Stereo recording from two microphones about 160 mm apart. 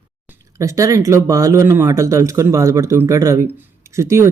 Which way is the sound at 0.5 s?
20° right (ahead or behind).